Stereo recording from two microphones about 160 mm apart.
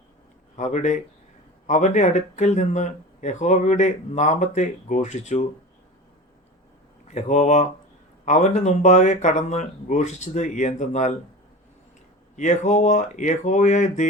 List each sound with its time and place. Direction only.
0.5 s speech: 50° left (ahead or behind)
7.1 s speech: 45° left (ahead or behind)
12.4 s speech: 50° left (ahead or behind)